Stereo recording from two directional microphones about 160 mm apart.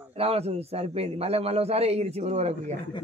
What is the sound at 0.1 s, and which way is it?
A man's voice, 40° right (ahead or behind).